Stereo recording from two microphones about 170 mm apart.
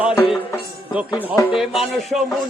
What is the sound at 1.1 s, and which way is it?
Music, 20° left (ahead or behind).